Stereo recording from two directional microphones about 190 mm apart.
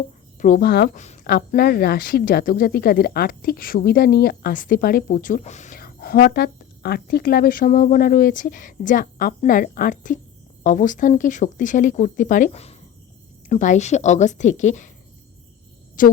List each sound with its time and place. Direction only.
0.3 s speech: 45° left (ahead or behind)
0.9 s a woman's voice: 40° left (ahead or behind)
1.3 s a woman's voice: 55° left (ahead or behind)
16.0 s speech: 45° left (ahead or behind)